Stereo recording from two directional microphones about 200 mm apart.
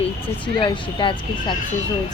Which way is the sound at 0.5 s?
25° left (ahead or behind).